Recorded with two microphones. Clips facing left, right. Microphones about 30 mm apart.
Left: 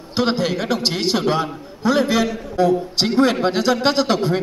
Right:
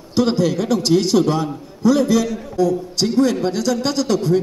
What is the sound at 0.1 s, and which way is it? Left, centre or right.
A man's voice, left.